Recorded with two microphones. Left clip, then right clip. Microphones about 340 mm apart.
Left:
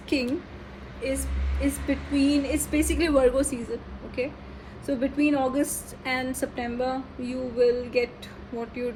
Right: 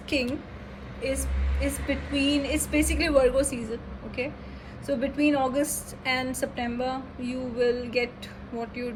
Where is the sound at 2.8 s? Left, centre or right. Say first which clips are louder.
Even; left.